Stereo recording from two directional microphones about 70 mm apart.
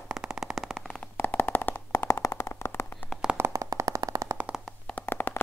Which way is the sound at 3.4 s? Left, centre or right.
Right.